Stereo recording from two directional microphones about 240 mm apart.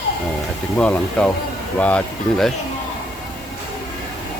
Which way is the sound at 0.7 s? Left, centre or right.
Centre.